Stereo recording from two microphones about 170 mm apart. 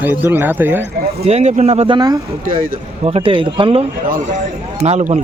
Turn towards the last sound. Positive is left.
turn(degrees=-40)  # may be behind; listen again after turning